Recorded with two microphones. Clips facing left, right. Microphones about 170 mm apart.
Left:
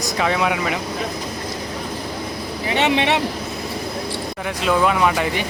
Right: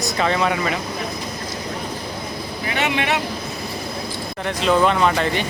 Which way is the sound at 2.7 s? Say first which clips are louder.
Left 4 dB; 25° left (ahead or behind).